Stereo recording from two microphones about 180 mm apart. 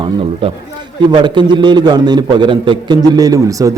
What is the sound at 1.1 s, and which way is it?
A man's voice, 25° right (ahead or behind).